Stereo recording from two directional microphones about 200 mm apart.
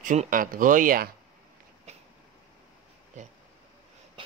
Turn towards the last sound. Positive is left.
turn(degrees=-35)  # may be behind; listen again after turning